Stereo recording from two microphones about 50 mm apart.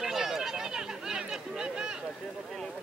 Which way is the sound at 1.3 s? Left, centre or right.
Centre.